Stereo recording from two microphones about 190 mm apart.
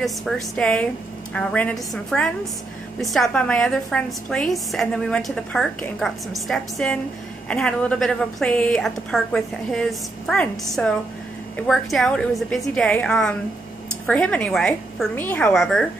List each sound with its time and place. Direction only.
0.0 s a woman's voice: centre (ahead or behind)